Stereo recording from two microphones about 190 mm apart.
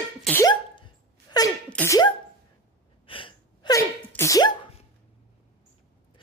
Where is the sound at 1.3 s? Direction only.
20° left (ahead or behind).